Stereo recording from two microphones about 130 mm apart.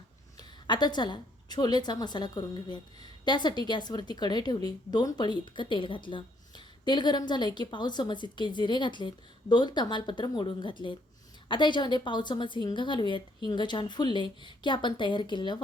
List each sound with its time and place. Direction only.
0.3 s a woman's voice: 35° left (ahead or behind)